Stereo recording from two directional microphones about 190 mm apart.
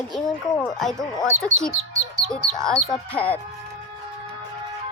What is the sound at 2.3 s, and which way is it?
Speech, 5° left (ahead or behind).